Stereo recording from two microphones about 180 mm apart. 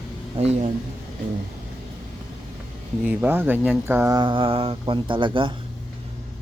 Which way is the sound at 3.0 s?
10° right (ahead or behind).